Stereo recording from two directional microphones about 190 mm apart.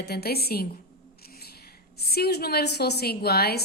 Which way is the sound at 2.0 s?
55° left (ahead or behind).